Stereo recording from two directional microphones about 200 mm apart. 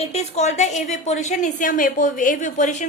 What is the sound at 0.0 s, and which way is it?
Speech, 35° left (ahead or behind).